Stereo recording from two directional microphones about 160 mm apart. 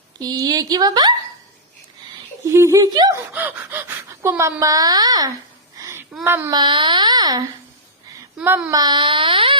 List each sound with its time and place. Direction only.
0.2 s a woman's voice: 25° right (ahead or behind)
2.4 s speech: 20° right (ahead or behind)
3.3 s speech: 10° right (ahead or behind)
5.8 s a sound: 15° right (ahead or behind)
6.2 s speech: 15° right (ahead or behind)
6.5 s a woman's voice: 30° right (ahead or behind)
8.4 s speech: 10° right (ahead or behind)
8.8 s speech: 30° right (ahead or behind)